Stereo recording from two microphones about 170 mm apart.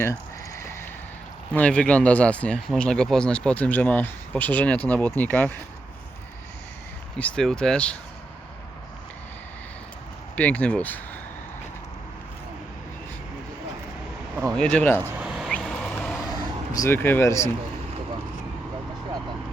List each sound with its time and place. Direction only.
0.0 s a sound: 15° left (ahead or behind)
1.5 s speech: 5° left (ahead or behind)
7.2 s speech: 5° left (ahead or behind)
10.3 s speech: 10° left (ahead or behind)
14.5 s speech: 5° left (ahead or behind)
15.0 s vehicle: 5° right (ahead or behind)
16.3 s speech: 20° left (ahead or behind)